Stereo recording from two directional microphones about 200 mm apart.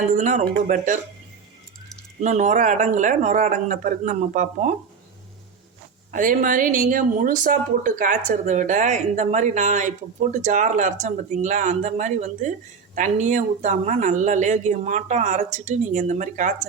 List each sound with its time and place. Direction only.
0.1 s speech: 35° right (ahead or behind)
2.2 s speech: 35° right (ahead or behind)
6.1 s speech: 40° right (ahead or behind)